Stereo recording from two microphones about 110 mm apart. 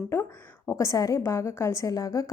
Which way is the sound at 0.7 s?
30° left (ahead or behind).